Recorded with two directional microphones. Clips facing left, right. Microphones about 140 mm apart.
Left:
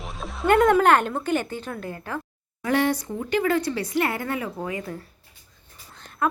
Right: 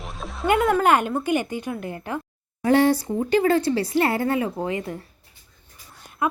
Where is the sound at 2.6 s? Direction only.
30° right (ahead or behind).